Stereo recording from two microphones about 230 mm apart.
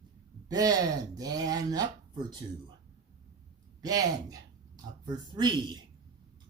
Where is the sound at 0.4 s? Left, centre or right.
Centre.